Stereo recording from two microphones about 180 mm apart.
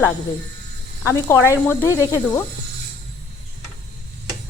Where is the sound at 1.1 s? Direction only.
15° left (ahead or behind).